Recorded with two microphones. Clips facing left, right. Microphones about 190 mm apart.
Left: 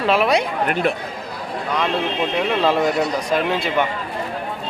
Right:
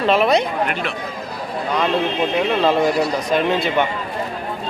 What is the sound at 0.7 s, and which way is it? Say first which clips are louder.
Speech: left 5 dB; 45° left (ahead or behind).